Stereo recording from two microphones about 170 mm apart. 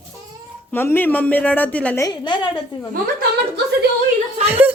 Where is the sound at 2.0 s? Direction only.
25° left (ahead or behind).